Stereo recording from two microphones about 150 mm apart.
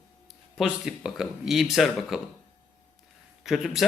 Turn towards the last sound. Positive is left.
turn(degrees=0)  # may be behind; listen again after turning